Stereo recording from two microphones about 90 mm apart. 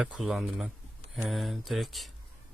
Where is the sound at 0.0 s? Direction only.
5° right (ahead or behind).